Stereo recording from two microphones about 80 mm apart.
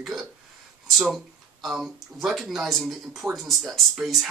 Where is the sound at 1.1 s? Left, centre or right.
Centre.